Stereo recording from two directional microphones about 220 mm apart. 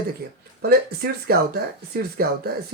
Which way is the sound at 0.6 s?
45° right (ahead or behind).